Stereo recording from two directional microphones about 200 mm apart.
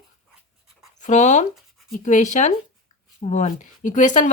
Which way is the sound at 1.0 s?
35° left (ahead or behind).